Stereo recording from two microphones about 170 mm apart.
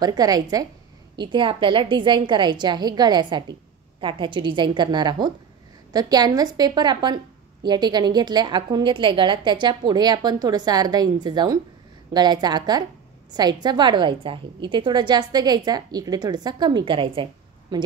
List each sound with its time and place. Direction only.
0.0 s a woman's voice: 20° right (ahead or behind)